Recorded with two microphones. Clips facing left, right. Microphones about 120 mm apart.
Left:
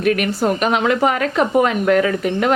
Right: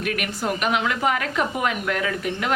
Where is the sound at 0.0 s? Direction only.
35° left (ahead or behind).